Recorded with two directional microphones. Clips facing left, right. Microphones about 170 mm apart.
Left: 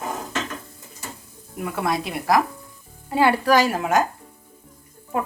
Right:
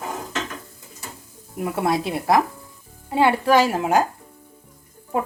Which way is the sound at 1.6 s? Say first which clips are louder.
Right 3 dB; 30° right (ahead or behind).